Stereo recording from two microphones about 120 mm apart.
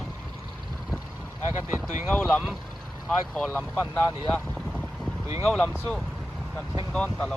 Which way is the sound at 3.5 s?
15° left (ahead or behind).